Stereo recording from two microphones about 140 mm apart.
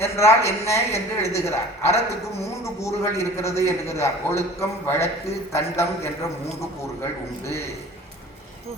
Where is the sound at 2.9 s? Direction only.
20° left (ahead or behind).